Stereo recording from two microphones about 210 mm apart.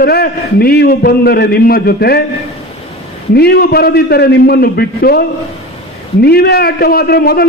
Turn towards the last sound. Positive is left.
turn(degrees=50)  # may be behind; listen again after turning